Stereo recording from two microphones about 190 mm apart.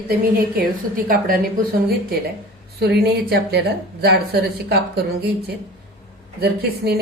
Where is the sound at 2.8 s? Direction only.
60° right (ahead or behind).